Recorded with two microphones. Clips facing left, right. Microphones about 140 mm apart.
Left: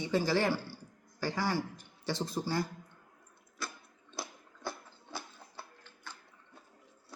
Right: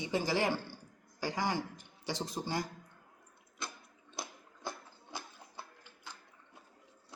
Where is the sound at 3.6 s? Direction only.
15° right (ahead or behind).